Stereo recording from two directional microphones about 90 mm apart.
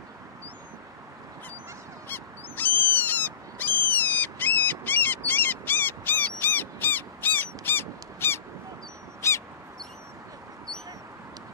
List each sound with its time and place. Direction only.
2.0 s owl: 20° left (ahead or behind)
9.2 s crow: 30° left (ahead or behind)